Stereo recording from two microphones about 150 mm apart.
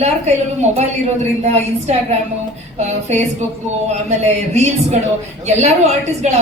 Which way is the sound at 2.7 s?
50° right (ahead or behind).